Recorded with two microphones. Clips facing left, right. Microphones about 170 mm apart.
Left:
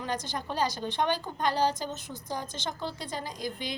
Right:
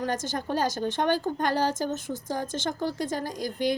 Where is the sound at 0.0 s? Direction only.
45° right (ahead or behind).